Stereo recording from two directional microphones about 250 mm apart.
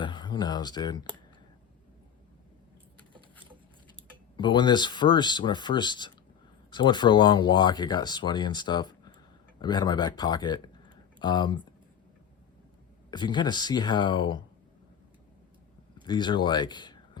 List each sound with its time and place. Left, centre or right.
0.0 s speech: centre
4.4 s speech: centre
13.1 s speech: centre
16.0 s speech: centre